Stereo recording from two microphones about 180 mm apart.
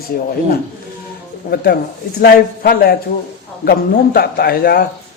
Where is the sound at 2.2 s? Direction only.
60° left (ahead or behind).